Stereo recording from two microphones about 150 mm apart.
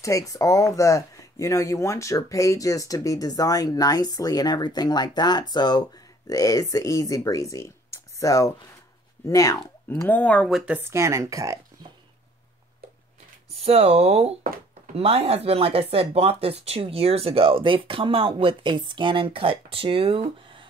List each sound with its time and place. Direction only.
0.0 s speech: 20° left (ahead or behind); by 10.6 s 5° left (ahead or behind)
10.6 s speech: 10° right (ahead or behind)
13.5 s speech: 40° right (ahead or behind)